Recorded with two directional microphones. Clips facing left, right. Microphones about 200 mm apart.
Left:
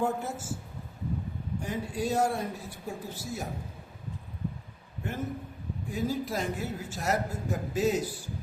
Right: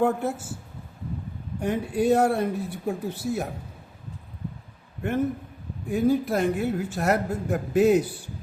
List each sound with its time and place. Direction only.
0.0 s a man's voice: 60° right (ahead or behind)
1.6 s a man's voice: 60° right (ahead or behind)
5.9 s a man's voice: 60° right (ahead or behind)